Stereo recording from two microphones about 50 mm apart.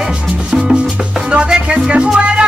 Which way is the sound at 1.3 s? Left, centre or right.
Centre.